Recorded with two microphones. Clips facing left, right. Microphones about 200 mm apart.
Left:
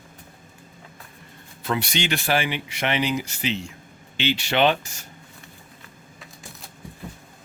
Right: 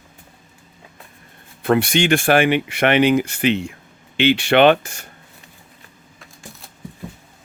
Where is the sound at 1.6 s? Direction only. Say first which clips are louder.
Right 9 dB; 55° right (ahead or behind).